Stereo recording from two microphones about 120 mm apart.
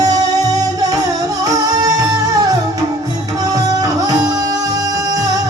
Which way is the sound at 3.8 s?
30° right (ahead or behind).